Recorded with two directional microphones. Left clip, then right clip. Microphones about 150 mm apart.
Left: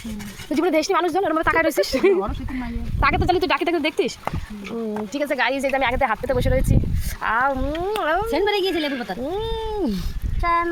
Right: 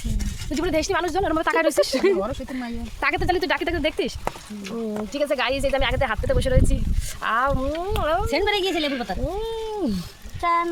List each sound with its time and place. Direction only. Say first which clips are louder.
0.5 s speech: left 4 dB; 15° left (ahead or behind)
1.2 s speech: left 2 dB; 5° right (ahead or behind)
2.6 s speech: left 8 dB; 15° left (ahead or behind); by 4.0 s centre (ahead or behind)
5.1 s speech: left 1 dB; 5° left (ahead or behind)
8.3 s speech: left 1 dB; 20° right (ahead or behind)
9.2 s speech: left 2 dB; 5° right (ahead or behind)
10.4 s speech: left 1 dB; 20° right (ahead or behind)